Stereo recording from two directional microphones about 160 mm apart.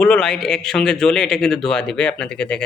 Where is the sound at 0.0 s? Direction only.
5° left (ahead or behind).